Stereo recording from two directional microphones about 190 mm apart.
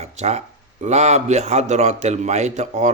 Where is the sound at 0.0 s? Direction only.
35° right (ahead or behind).